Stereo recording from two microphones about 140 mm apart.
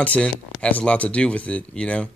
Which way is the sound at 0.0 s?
10° left (ahead or behind).